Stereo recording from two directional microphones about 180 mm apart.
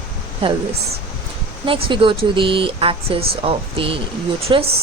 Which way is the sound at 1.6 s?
30° right (ahead or behind).